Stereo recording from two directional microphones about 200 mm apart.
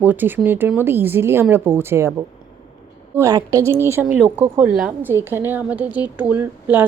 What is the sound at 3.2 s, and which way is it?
A woman's voice, 15° right (ahead or behind).